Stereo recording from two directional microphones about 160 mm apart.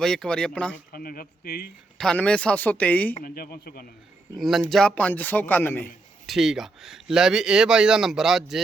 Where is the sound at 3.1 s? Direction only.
65° left (ahead or behind).